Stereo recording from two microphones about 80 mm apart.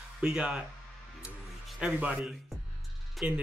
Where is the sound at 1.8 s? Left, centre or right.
Centre.